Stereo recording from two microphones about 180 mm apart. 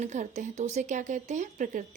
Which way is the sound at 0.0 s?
40° right (ahead or behind).